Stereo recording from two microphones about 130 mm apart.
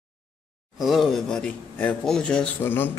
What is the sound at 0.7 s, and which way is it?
Speech, centre (ahead or behind).